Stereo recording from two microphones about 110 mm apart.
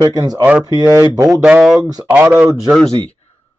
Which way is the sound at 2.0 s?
15° right (ahead or behind).